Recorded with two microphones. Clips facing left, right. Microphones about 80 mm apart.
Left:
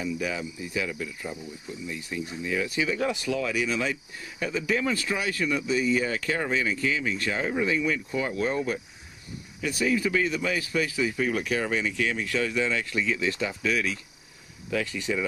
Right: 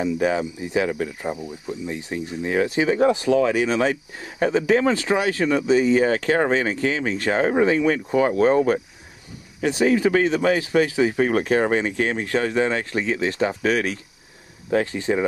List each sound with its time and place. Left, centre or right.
0.0 s speech: right
0.8 s speech: right
1.9 s speech: right
9.7 s speech: right
12.4 s speech: right
13.2 s speech: right
13.6 s speech: right
14.9 s speech: right